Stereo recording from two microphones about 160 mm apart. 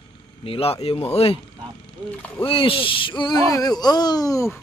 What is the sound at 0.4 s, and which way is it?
Speech, 35° left (ahead or behind).